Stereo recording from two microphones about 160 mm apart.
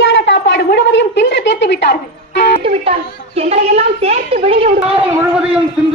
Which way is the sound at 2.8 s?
40° right (ahead or behind).